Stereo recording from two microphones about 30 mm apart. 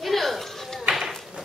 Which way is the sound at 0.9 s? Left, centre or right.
Right.